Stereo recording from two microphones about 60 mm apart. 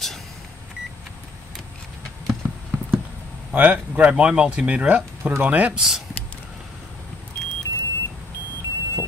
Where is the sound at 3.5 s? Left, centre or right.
Right.